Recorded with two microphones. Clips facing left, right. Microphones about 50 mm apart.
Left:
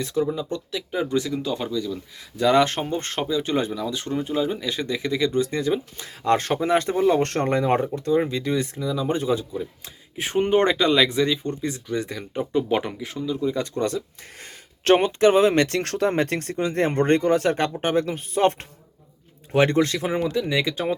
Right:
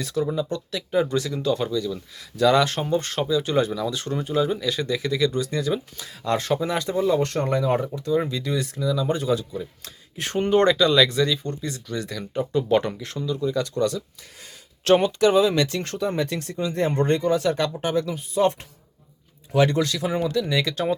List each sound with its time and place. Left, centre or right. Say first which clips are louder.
0.0 s speech: left 2 dB; left
0.5 s speech: right 4 dB; centre
2.3 s speech: even; left
3.7 s speech: even; centre; by 20.1 s left
20.1 s speech: even; centre